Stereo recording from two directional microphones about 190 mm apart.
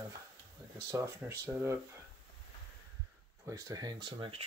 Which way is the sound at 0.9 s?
15° right (ahead or behind).